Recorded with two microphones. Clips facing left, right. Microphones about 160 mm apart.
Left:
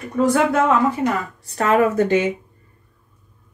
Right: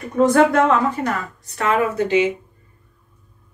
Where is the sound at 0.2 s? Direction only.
5° left (ahead or behind).